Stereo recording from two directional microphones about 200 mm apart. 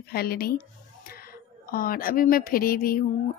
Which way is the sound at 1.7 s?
45° left (ahead or behind).